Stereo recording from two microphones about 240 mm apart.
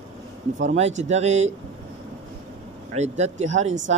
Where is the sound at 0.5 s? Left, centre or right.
Right.